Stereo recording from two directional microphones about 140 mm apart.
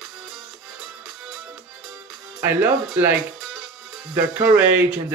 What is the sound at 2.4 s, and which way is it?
Speech, 15° right (ahead or behind).